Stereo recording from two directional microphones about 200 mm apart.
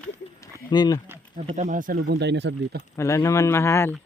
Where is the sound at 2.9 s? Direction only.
15° left (ahead or behind).